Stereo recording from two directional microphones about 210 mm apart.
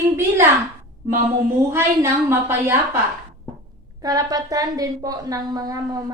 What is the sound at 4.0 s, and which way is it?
A woman's voice, 15° right (ahead or behind).